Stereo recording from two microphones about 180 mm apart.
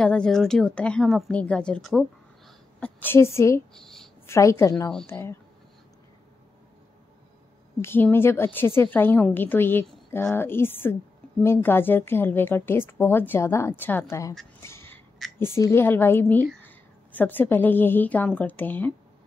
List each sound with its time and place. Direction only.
0.0 s a woman's voice: 5° left (ahead or behind)
3.7 s a sound: centre (ahead or behind)
4.3 s speech: 15° left (ahead or behind)
7.8 s speech: 10° left (ahead or behind)
14.6 s a sound: 15° left (ahead or behind)
15.3 s speech: 15° left (ahead or behind)